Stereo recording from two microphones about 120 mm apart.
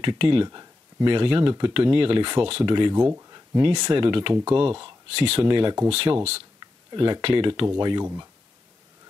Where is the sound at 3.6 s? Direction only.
40° right (ahead or behind).